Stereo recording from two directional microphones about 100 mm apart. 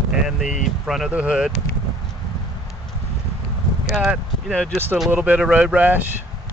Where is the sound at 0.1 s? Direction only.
5° right (ahead or behind).